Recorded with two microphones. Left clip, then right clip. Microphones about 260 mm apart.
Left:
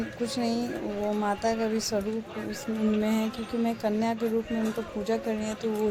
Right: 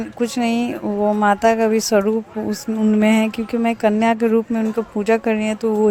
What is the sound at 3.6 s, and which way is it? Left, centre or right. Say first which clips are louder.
Speech: right 12 dB; right.